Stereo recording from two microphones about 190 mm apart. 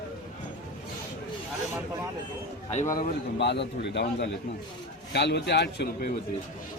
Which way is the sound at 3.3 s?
65° left (ahead or behind).